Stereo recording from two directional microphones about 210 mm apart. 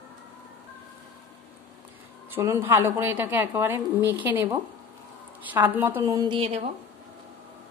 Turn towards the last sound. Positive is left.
turn(degrees=-25)  # may be behind; listen again after turning